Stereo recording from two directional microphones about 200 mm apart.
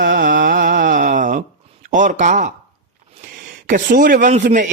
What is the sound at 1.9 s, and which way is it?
Speech, 40° right (ahead or behind).